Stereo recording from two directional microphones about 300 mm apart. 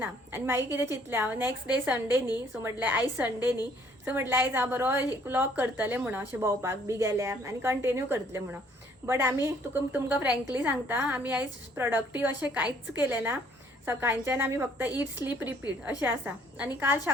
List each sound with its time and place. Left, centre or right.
0.0 s a woman's voice: centre
4.0 s a woman's voice: centre